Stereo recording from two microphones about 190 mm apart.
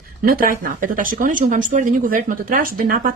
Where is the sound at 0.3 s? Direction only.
50° right (ahead or behind).